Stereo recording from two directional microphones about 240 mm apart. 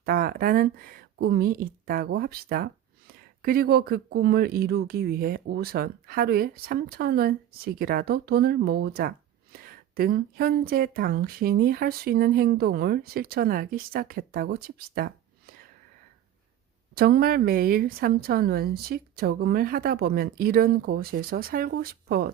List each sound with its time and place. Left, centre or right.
0.0 s speech: right
16.9 s speech: right